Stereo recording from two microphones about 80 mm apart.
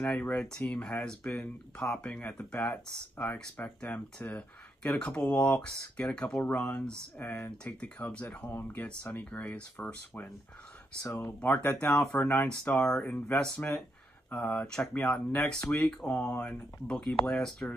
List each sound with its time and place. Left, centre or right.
0.0 s speech: centre
7.2 s speech: left
7.6 s speech: centre